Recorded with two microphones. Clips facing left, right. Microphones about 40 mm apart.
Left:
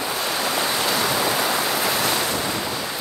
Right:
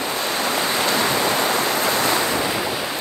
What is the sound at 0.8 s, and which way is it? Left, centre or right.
Waves, right.